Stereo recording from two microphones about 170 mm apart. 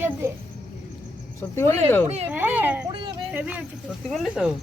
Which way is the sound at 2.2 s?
10° right (ahead or behind).